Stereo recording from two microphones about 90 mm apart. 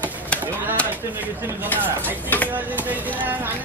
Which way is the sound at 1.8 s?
20° right (ahead or behind).